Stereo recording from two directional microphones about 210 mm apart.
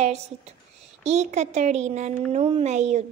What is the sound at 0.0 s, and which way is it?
A woman's voice, 30° right (ahead or behind).